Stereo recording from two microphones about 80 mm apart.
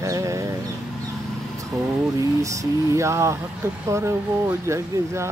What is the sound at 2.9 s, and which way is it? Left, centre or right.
Mantra, right.